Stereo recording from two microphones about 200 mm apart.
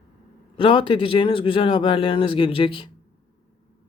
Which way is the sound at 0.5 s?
25° left (ahead or behind).